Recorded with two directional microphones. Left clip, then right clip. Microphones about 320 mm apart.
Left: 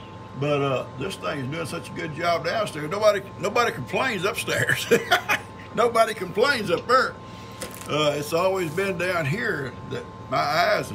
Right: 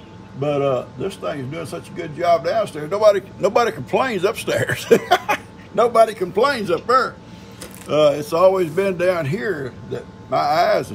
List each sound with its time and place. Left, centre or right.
0.4 s speech: centre